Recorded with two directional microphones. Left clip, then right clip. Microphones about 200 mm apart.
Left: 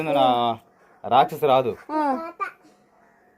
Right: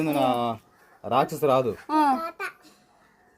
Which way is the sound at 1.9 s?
65° right (ahead or behind).